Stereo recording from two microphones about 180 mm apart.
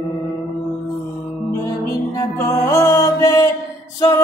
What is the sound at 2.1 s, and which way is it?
Music, 15° left (ahead or behind).